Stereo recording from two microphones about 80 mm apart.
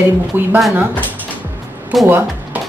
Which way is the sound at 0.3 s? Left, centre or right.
Right.